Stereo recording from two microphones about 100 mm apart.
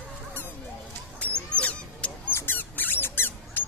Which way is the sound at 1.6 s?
10° left (ahead or behind).